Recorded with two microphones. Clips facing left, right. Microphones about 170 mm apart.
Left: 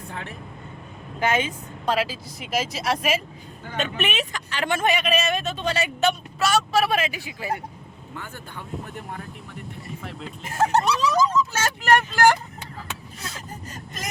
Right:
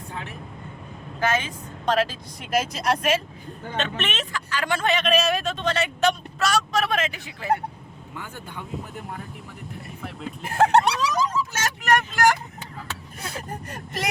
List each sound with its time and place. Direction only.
1.2 s speech: 15° left (ahead or behind)
10.4 s a sound: 60° right (ahead or behind)
11.5 s vehicle: 30° left (ahead or behind)
13.3 s speech: 60° right (ahead or behind)